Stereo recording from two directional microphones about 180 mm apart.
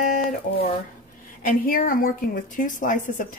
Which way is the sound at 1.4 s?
50° left (ahead or behind).